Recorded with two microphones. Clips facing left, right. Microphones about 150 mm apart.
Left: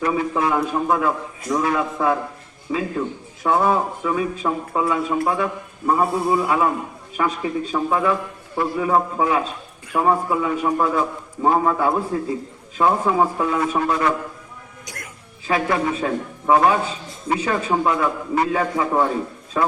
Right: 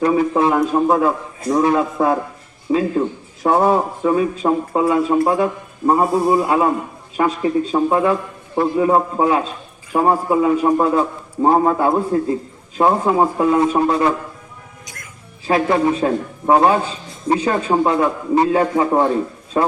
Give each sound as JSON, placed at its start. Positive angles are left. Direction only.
{"t": 0.0, "sound": "a man's voice", "side_deg": -35}
{"t": 15.4, "sound": "a man's voice", "side_deg": -30}